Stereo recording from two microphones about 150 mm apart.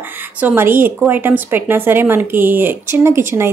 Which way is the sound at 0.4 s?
10° right (ahead or behind).